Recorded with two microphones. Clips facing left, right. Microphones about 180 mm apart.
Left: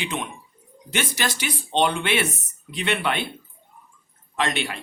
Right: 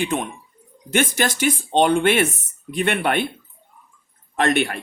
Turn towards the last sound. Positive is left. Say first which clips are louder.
# right 6 dB
turn(degrees=-55)  # may be behind; listen again after turning